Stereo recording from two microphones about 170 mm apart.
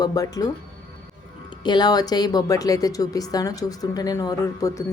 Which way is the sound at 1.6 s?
25° left (ahead or behind).